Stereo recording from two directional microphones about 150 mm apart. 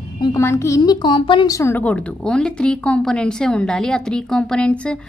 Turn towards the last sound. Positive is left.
turn(degrees=5)  # may be behind; listen again after turning